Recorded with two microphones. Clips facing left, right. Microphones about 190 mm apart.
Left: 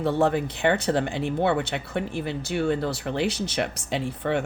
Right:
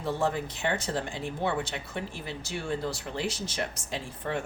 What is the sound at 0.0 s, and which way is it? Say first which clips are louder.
Speech: left 7 dB; 65° left (ahead or behind).